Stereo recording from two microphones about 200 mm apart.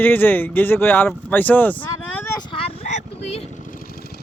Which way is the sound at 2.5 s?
30° left (ahead or behind).